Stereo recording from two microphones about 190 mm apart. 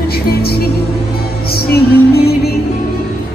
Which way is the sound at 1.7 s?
55° left (ahead or behind).